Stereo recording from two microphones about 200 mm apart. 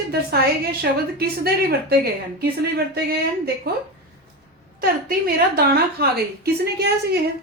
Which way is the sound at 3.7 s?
50° right (ahead or behind).